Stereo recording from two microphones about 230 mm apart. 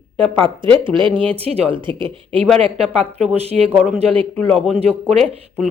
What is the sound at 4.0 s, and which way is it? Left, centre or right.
Speech, right.